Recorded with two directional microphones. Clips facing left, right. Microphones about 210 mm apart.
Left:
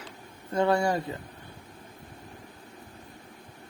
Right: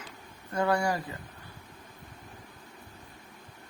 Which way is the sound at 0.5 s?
25° left (ahead or behind).